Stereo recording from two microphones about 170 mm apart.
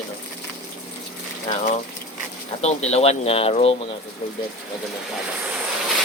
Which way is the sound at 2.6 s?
40° left (ahead or behind).